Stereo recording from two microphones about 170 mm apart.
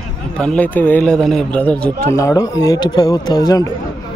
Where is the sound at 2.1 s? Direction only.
20° left (ahead or behind).